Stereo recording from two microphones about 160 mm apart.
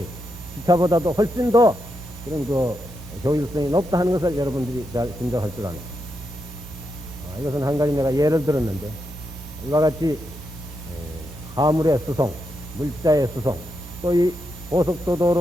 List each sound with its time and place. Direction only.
0.6 s a man's voice: 20° right (ahead or behind)
7.4 s a man's voice: 20° right (ahead or behind)
9.7 s a man's voice: 25° right (ahead or behind)
11.5 s a man's voice: 25° right (ahead or behind)